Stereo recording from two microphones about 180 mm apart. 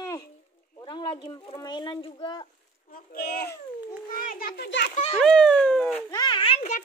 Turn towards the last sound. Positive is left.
turn(degrees=35)  # may be behind; listen again after turning